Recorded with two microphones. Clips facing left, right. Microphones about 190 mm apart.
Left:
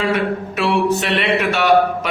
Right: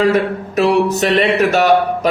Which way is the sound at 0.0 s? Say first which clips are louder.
Right 5 dB; 40° right (ahead or behind).